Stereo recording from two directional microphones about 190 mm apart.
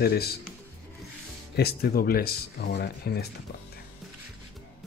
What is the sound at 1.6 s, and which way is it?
Speech, 55° left (ahead or behind).